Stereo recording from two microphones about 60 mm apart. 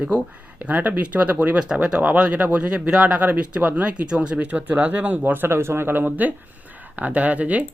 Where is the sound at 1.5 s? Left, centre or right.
Centre; by 6.1 s right.